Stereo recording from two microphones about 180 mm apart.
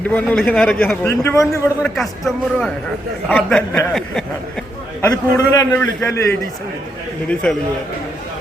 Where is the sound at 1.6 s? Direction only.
5° left (ahead or behind).